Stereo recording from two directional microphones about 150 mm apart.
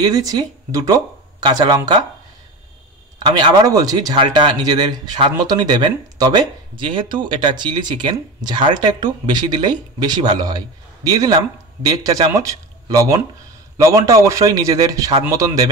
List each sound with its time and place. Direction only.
0.0 s speech: 25° right (ahead or behind)
3.2 s a man's voice: 25° right (ahead or behind)